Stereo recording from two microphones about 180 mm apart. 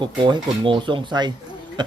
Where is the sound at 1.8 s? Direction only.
25° right (ahead or behind).